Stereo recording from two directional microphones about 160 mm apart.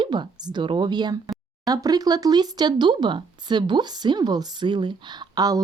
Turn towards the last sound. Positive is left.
turn(degrees=-25)  # may be behind; listen again after turning